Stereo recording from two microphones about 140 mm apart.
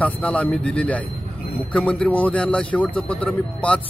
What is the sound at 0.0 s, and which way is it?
Speech, 10° left (ahead or behind).